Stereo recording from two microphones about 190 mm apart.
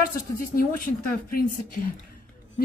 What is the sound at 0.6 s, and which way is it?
Speech, 50° left (ahead or behind).